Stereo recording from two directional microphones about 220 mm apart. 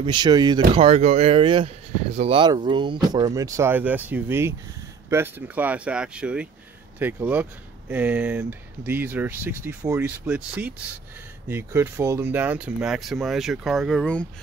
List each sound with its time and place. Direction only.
0.0 s speech: 20° right (ahead or behind); by 14.2 s 5° left (ahead or behind)